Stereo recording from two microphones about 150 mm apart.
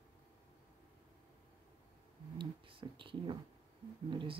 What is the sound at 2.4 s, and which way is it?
Speech, 35° right (ahead or behind).